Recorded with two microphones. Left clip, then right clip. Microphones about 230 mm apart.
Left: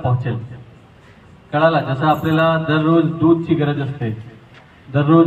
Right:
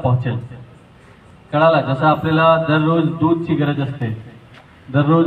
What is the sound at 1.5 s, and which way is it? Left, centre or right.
A man's voice, right.